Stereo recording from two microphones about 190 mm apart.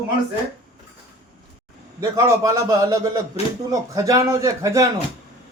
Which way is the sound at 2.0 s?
20° right (ahead or behind).